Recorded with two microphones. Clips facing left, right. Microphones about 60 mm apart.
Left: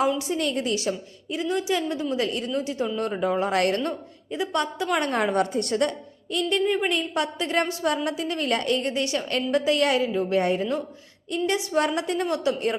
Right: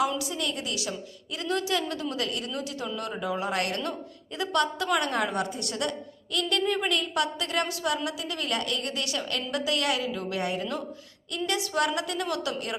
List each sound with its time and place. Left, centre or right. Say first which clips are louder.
0.2 s a woman's voice: left 6 dB; left
1.4 s a woman's voice: left 3 dB; left
3.2 s speech: left 6 dB; left
3.8 s a woman's voice: left 4 dB; left
4.9 s a woman's voice: left 6 dB; left
6.3 s a woman's voice: left 4 dB; left
11.3 s a woman's voice: left 5 dB; left